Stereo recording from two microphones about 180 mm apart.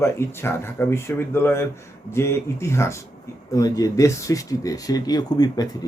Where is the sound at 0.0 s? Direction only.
15° left (ahead or behind).